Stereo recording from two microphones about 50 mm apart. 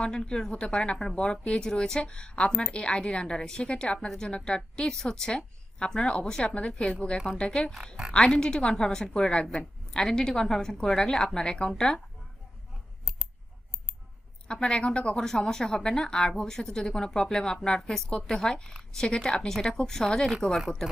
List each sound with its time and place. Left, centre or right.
0.0 s a woman's voice: centre
14.4 s a woman's voice: centre